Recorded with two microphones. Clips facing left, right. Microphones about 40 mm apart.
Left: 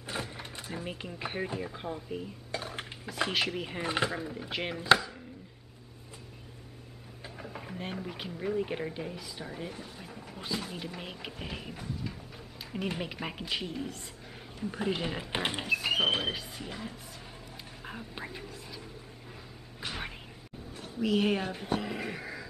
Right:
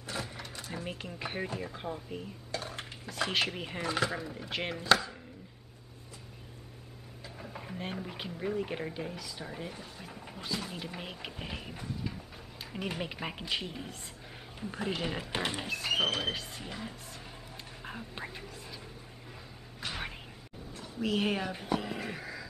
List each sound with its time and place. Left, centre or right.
0.0 s a sound: left
0.7 s speech: centre
2.5 s dishes: left
2.8 s speech: centre
3.8 s speech: left
4.4 s speech: centre
7.3 s speech: centre
15.3 s speech: left
15.6 s speech: centre
19.8 s a sound: centre
21.0 s speech: centre